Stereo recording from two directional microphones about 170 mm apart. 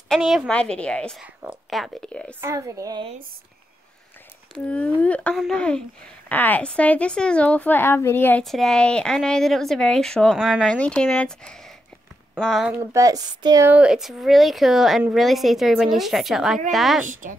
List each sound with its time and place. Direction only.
0.1 s a woman's voice: centre (ahead or behind)
1.2 s speech: 10° right (ahead or behind)
2.4 s speech: 20° right (ahead or behind)
4.6 s a woman's voice: 10° left (ahead or behind)
12.7 s speech: 20° right (ahead or behind)
13.7 s a woman's voice: 5° right (ahead or behind)
17.1 s speech: 50° right (ahead or behind)